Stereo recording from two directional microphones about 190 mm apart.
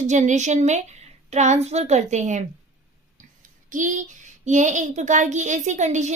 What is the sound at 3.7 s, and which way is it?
A woman's voice, 40° right (ahead or behind).